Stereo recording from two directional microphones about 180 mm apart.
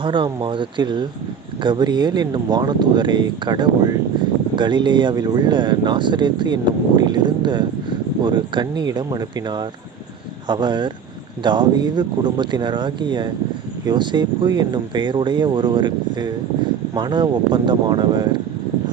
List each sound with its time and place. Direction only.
0.0 s speech: 25° right (ahead or behind)